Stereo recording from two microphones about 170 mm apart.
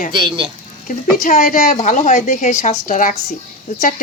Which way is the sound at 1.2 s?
50° left (ahead or behind).